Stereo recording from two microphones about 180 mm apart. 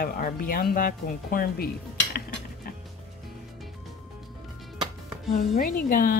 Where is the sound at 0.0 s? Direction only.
55° left (ahead or behind).